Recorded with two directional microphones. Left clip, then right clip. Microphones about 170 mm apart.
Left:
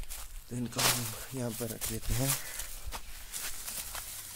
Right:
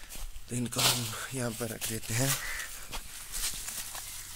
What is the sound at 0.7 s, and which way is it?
Speech, 10° left (ahead or behind).